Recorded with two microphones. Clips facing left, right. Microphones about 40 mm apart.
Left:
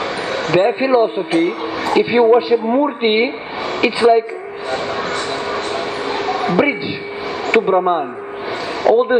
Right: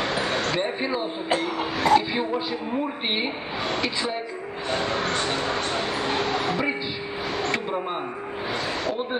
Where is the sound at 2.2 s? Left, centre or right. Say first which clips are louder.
Left 15 dB; left.